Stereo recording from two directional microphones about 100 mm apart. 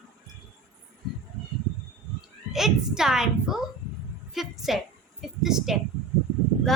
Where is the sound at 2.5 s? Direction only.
5° right (ahead or behind).